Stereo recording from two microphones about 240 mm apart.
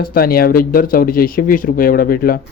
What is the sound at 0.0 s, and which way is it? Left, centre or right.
A man's voice, left.